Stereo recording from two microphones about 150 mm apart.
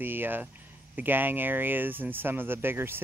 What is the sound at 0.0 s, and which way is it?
Speech, 15° right (ahead or behind).